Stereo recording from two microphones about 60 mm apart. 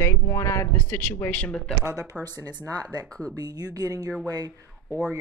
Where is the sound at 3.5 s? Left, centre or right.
Right.